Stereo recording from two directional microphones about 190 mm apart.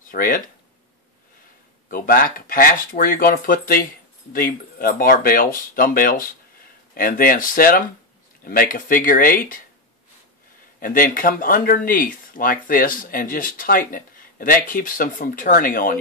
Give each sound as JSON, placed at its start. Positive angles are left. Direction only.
{"t": 0.0, "sound": "speech", "side_deg": 45}
{"t": 1.9, "sound": "speech", "side_deg": 45}
{"t": 10.8, "sound": "speech", "side_deg": 50}